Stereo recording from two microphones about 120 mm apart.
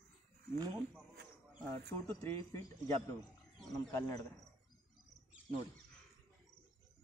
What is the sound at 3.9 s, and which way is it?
Speech, 30° left (ahead or behind).